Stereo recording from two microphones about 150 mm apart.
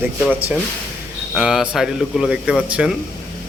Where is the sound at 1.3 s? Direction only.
5° right (ahead or behind).